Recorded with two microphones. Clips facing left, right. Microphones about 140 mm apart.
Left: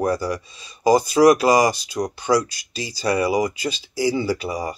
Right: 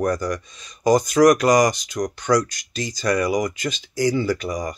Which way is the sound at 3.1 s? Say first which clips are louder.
Left 1 dB; 30° left (ahead or behind).